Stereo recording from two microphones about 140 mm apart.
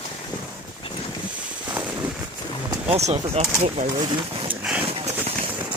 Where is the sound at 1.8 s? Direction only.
15° right (ahead or behind).